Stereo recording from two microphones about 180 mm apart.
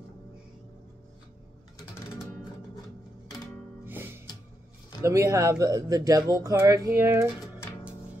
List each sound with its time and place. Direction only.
3.8 s music: 10° right (ahead or behind)
5.0 s speech: 15° right (ahead or behind)